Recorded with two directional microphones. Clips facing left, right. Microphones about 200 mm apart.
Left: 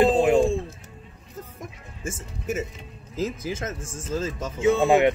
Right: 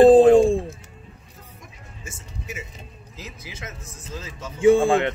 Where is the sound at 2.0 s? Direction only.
50° left (ahead or behind).